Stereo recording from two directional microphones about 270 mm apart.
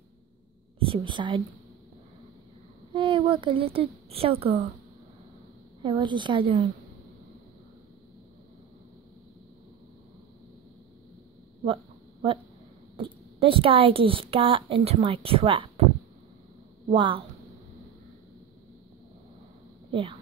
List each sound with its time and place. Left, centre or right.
0.7 s a woman's voice: centre
2.9 s a woman's voice: centre
5.8 s a woman's voice: centre
11.6 s a sound: centre
12.9 s a woman's voice: centre
16.9 s a woman's voice: centre
19.9 s speech: centre